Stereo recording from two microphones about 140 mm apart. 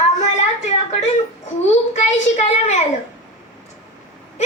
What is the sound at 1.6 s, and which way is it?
A woman's voice, 50° left (ahead or behind).